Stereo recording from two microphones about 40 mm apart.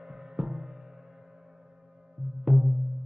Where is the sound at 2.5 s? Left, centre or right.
Centre.